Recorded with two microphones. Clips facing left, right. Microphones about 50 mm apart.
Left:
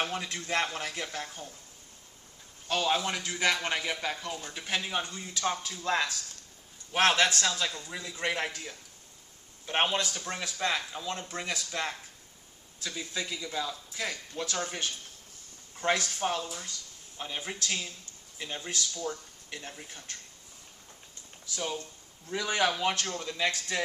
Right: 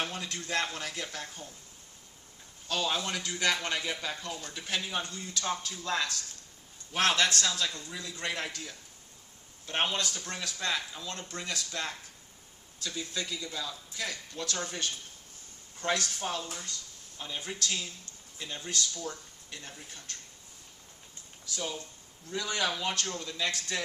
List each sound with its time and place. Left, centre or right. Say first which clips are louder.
0.0 s speech: left 3 dB; left
2.6 s speech: left 3 dB; left
21.5 s speech: left 2 dB; left